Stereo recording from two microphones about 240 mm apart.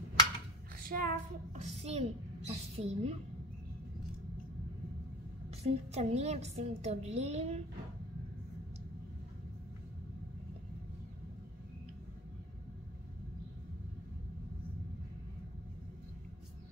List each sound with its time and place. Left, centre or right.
0.7 s a woman's voice: right
5.6 s a woman's voice: right